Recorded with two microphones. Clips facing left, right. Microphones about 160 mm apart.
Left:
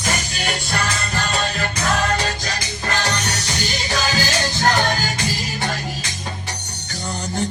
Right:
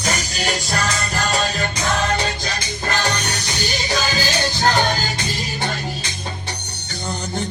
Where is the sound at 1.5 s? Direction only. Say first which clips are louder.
Even; 35° right (ahead or behind).